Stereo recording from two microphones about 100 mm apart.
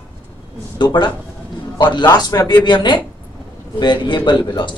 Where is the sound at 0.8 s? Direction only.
50° left (ahead or behind).